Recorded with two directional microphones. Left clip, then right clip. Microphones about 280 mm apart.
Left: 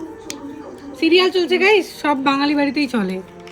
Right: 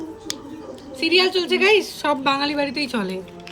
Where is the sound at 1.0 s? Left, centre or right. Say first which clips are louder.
Left 3 dB; centre.